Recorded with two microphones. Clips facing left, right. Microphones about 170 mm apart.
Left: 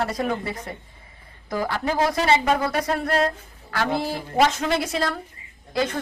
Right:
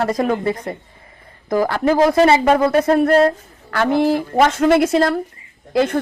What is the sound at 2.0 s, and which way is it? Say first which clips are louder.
A woman's voice: right 7 dB; 55° right (ahead or behind).